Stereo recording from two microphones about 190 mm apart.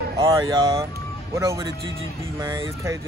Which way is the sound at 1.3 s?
15° right (ahead or behind).